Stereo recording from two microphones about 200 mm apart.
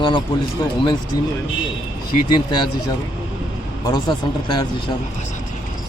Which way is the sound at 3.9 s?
20° left (ahead or behind).